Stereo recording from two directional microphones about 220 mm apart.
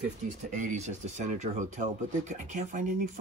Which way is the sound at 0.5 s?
35° right (ahead or behind).